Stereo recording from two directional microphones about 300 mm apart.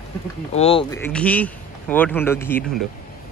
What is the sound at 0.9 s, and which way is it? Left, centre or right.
Speech, centre.